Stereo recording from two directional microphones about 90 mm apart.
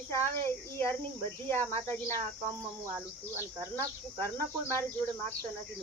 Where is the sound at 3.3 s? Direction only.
30° left (ahead or behind).